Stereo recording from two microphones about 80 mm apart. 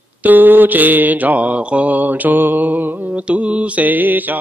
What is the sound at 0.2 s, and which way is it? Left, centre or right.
Mantra, right.